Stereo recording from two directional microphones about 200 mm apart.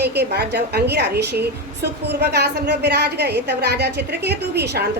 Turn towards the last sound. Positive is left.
turn(degrees=-55)  # may be behind; listen again after turning